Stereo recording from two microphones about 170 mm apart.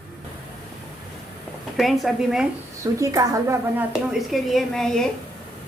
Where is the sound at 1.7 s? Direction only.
Centre (ahead or behind).